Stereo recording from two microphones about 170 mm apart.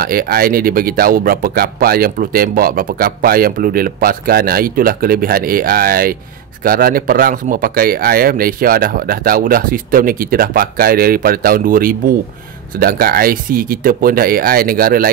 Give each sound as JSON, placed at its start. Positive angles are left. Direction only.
{"t": 0.0, "sound": "speech", "side_deg": -60}